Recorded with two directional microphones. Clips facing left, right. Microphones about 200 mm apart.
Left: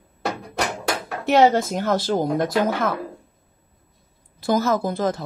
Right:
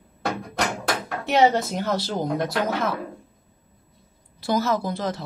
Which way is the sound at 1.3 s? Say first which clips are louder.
Left 3 dB; 50° left (ahead or behind).